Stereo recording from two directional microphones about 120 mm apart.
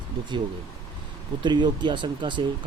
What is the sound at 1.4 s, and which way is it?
Speech, 40° right (ahead or behind).